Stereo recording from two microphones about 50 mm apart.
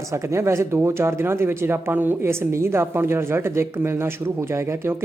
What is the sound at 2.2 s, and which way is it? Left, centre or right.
Speech, right.